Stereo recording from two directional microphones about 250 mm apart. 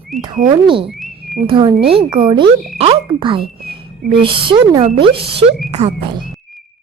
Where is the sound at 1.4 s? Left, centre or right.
Right.